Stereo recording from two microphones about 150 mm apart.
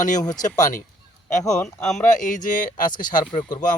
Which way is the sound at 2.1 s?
60° left (ahead or behind).